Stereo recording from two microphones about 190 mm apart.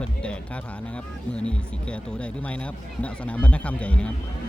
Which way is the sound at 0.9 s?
5° left (ahead or behind).